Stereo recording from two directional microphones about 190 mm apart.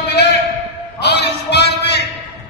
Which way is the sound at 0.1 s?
60° left (ahead or behind).